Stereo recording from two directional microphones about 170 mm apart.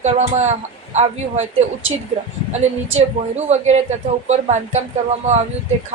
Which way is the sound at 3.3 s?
40° right (ahead or behind).